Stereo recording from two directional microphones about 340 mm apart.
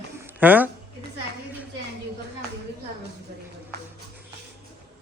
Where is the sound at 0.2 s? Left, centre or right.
Centre.